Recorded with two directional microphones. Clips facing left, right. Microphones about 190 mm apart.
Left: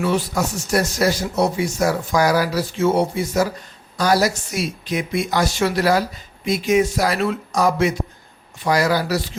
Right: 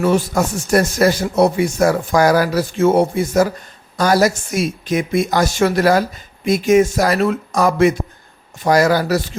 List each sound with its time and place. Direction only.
0.0 s speech: 45° right (ahead or behind)